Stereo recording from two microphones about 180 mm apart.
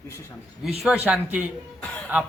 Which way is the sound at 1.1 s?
5° right (ahead or behind).